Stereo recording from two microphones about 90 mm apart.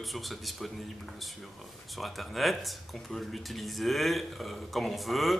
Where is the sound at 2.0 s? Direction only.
Centre (ahead or behind).